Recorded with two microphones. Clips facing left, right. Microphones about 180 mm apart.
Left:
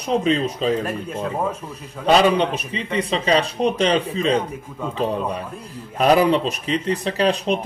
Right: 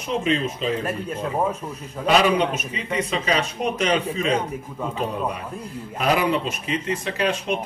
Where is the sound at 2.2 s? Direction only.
35° left (ahead or behind).